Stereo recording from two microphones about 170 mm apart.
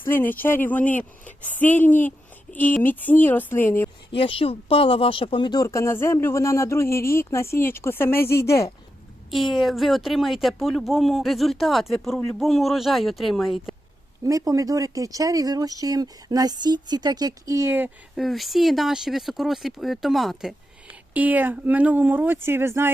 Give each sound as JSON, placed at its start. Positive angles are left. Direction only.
{"t": 0.0, "sound": "speech", "side_deg": 15}
{"t": 4.1, "sound": "speech", "side_deg": 30}
{"t": 9.3, "sound": "speech", "side_deg": 0}
{"t": 14.3, "sound": "speech", "side_deg": -20}
{"t": 18.2, "sound": "speech", "side_deg": 0}